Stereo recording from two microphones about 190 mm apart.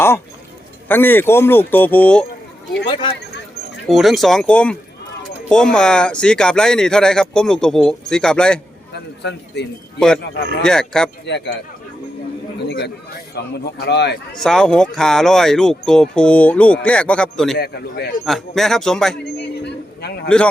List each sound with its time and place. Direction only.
0.9 s speech: 10° left (ahead or behind)
3.8 s speech: centre (ahead or behind)
9.2 s a man's voice: 60° left (ahead or behind)
10.6 s speech: 5° left (ahead or behind)
11.3 s a man's voice: 60° left (ahead or behind)
12.6 s a man's voice: 55° left (ahead or behind)
14.3 s speech: 5° left (ahead or behind)
17.6 s a man's voice: 60° left (ahead or behind)
18.3 s speech: centre (ahead or behind)
19.2 s a sound: 60° left (ahead or behind)
20.2 s speech: 5° left (ahead or behind)